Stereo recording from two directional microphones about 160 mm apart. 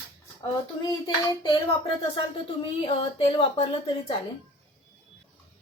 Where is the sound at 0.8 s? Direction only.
25° left (ahead or behind).